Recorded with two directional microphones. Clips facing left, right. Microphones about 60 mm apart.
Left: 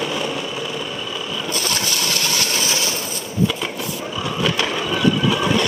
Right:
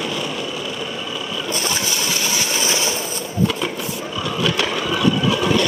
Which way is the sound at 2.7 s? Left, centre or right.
Right.